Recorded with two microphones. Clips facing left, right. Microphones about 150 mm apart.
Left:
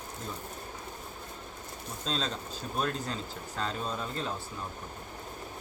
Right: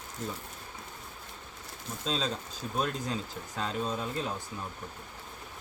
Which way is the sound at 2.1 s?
5° right (ahead or behind).